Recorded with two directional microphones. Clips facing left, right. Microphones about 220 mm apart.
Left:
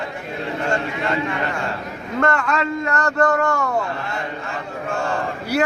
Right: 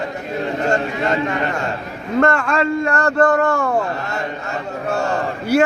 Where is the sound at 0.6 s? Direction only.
40° right (ahead or behind).